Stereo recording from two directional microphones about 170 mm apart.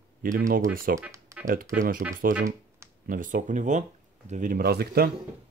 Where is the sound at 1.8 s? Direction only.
55° right (ahead or behind).